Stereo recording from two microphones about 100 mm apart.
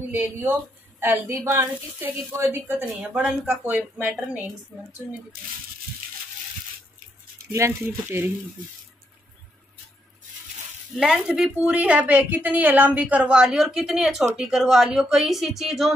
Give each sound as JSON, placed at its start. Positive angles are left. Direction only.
{"t": 0.1, "sound": "a woman's voice", "side_deg": -20}
{"t": 3.2, "sound": "speech", "side_deg": 0}
{"t": 3.6, "sound": "a woman's voice", "side_deg": -20}
{"t": 7.5, "sound": "a woman's voice", "side_deg": -25}
{"t": 11.0, "sound": "a woman's voice", "side_deg": -5}